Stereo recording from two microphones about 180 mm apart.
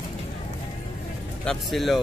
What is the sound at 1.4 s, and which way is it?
Speech, centre (ahead or behind).